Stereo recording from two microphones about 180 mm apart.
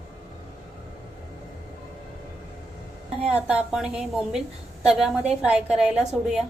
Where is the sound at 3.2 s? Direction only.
5° right (ahead or behind).